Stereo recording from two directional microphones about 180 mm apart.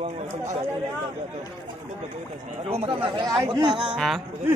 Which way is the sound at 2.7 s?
30° right (ahead or behind).